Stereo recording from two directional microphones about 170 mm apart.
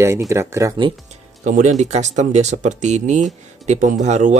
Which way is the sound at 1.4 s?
45° right (ahead or behind).